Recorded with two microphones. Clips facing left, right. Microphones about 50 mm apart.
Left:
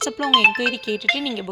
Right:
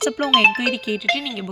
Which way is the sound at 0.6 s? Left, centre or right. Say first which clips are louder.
Even; centre.